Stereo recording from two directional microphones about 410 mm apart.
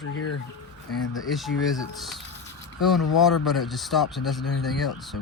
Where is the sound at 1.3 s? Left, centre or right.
Centre.